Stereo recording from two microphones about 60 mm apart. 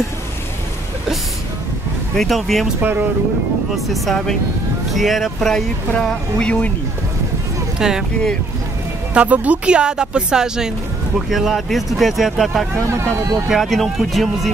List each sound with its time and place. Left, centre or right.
2.1 s speech: centre
2.8 s speech: right
3.7 s speech: centre
5.9 s speech: centre
7.8 s speech: centre
9.1 s speech: right; by 12.6 s centre
12.7 s speech: right
13.5 s speech: centre